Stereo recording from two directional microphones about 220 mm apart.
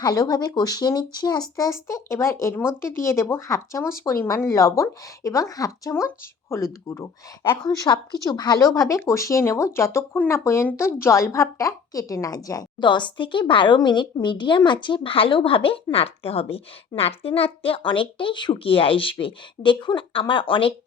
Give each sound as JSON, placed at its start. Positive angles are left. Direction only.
{"t": 0.0, "sound": "a woman's voice", "side_deg": 15}